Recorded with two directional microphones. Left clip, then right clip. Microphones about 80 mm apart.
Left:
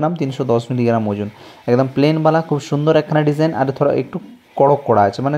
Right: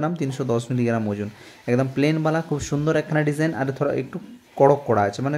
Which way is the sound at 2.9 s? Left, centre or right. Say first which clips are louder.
Left 7 dB; left.